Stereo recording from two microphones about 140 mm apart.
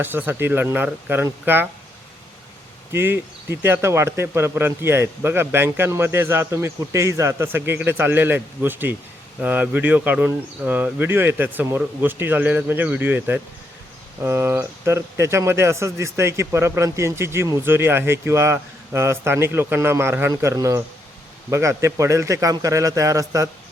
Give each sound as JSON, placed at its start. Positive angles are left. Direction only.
{"t": 0.0, "sound": "speech", "side_deg": -15}
{"t": 2.9, "sound": "speech", "side_deg": -15}